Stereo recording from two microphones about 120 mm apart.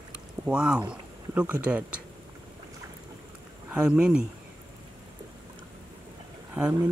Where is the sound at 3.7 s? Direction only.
10° right (ahead or behind).